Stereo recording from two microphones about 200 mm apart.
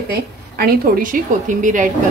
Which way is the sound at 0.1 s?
50° right (ahead or behind).